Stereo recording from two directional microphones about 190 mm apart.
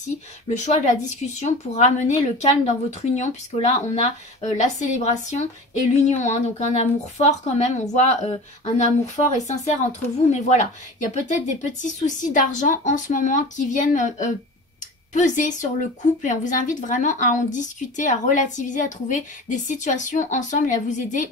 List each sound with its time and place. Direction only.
0.5 s a woman's voice: 40° left (ahead or behind)